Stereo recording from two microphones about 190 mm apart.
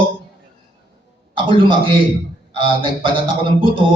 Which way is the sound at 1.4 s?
25° right (ahead or behind).